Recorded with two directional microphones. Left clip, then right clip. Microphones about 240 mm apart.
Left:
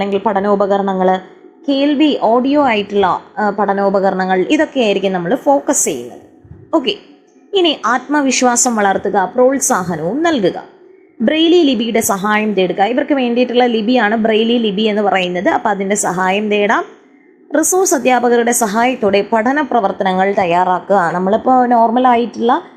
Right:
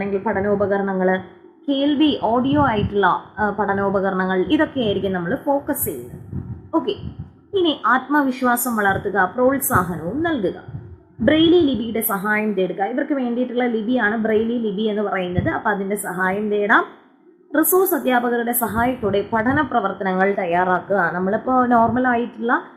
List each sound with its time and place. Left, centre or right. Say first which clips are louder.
0.0 s a woman's voice: left 7 dB; centre